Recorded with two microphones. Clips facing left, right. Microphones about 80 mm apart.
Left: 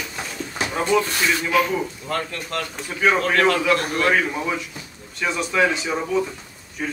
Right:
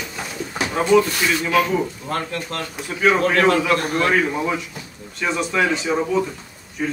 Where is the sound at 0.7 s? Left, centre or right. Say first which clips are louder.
Right 5 dB; centre.